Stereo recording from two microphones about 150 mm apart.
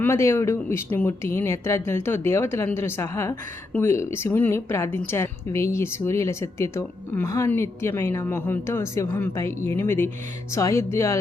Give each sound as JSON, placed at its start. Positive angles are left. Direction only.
{"t": 0.0, "sound": "speech", "side_deg": 15}